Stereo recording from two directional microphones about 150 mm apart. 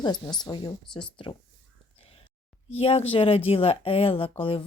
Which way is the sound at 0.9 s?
5° left (ahead or behind).